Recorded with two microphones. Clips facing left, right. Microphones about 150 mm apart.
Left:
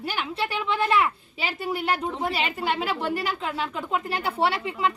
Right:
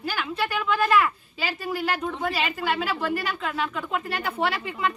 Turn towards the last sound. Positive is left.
turn(degrees=30)  # may be behind; listen again after turning